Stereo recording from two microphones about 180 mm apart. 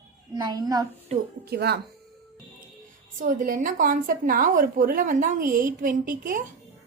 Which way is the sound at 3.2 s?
45° right (ahead or behind).